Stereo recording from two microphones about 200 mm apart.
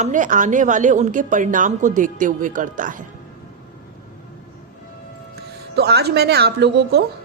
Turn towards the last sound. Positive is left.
turn(degrees=-55)  # may be behind; listen again after turning